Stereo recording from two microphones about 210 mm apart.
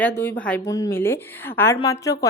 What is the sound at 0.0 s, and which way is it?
A woman's voice, 10° left (ahead or behind).